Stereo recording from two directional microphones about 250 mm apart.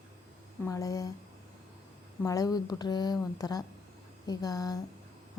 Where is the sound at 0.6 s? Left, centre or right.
Centre.